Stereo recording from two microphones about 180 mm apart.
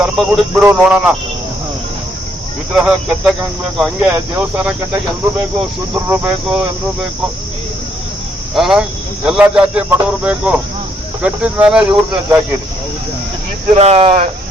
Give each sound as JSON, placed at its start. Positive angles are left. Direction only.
{"t": 0.0, "sound": "speech", "side_deg": -5}
{"t": 2.7, "sound": "speech", "side_deg": -5}
{"t": 5.9, "sound": "speech", "side_deg": -10}
{"t": 8.5, "sound": "speech", "side_deg": 0}
{"t": 13.7, "sound": "speech", "side_deg": -35}